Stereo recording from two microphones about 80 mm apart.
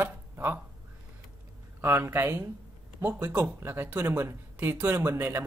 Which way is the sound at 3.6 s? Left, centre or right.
Right.